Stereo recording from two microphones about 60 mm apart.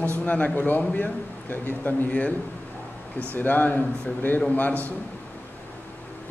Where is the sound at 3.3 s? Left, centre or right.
Left.